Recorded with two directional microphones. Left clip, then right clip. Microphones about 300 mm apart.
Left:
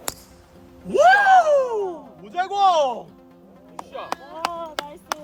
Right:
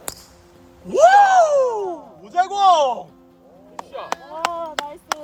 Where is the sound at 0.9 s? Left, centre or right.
Centre.